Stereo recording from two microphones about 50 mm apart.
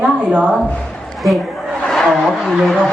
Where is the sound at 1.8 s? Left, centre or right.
Centre.